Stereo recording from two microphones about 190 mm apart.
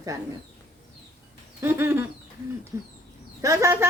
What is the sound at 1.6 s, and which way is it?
A woman's voice, 10° right (ahead or behind).